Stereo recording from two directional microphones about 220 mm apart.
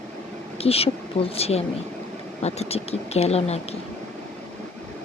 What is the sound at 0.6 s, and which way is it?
Speech, 25° left (ahead or behind).